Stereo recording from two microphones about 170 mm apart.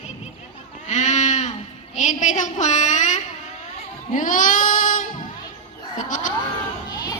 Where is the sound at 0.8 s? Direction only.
45° left (ahead or behind).